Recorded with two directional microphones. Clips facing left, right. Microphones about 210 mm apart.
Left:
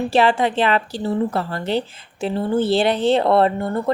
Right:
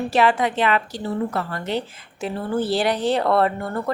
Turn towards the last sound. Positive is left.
turn(degrees=25)  # may be behind; listen again after turning